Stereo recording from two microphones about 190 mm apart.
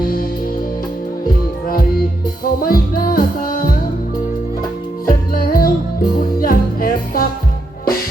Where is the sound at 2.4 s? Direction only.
50° left (ahead or behind).